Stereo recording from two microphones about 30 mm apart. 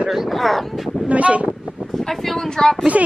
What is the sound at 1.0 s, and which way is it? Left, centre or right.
Speech, right.